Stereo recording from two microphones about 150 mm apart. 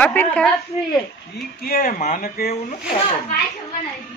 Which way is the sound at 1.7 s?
75° left (ahead or behind).